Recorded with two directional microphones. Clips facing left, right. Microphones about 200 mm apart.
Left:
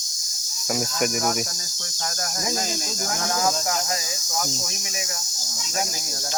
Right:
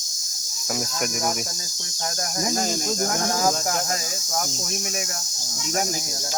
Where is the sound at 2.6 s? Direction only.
50° right (ahead or behind).